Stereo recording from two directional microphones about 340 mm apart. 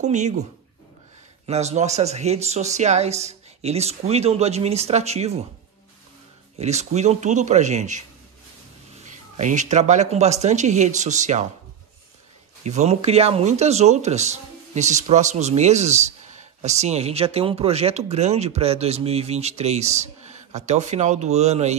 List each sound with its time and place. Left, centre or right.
0.0 s speech: right
6.6 s speech: centre
9.4 s speech: right
12.6 s speech: centre